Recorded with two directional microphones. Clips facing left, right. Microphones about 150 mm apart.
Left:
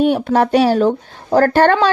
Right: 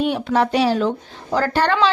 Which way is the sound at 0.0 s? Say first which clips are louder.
Left 5 dB; 45° left (ahead or behind).